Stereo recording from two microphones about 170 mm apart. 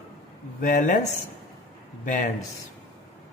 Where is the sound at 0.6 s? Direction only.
50° left (ahead or behind).